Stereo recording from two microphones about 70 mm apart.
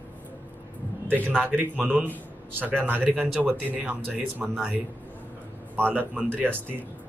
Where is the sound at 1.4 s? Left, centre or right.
Right.